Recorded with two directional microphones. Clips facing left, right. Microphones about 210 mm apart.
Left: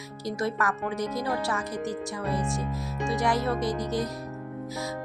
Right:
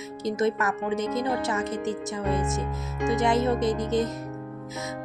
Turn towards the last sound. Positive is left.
turn(degrees=-20)  # may be behind; listen again after turning